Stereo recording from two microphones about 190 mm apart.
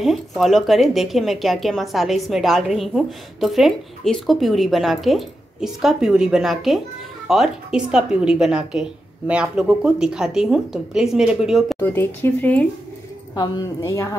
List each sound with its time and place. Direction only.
0.0 s speech: centre (ahead or behind)
11.8 s speech: 10° left (ahead or behind)